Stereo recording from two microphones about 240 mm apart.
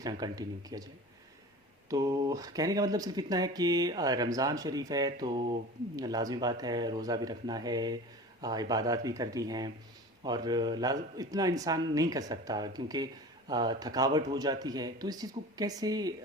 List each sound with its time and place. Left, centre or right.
0.0 s speech: centre
1.9 s speech: centre